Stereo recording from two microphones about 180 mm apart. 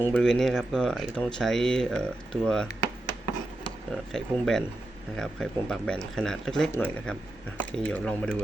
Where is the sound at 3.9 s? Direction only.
Centre (ahead or behind).